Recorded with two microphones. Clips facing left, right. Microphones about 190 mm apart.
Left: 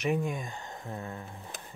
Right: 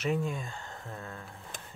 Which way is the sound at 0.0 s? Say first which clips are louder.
Left 1 dB; 15° left (ahead or behind).